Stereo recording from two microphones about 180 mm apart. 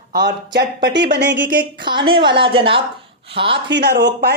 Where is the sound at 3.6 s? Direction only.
75° right (ahead or behind).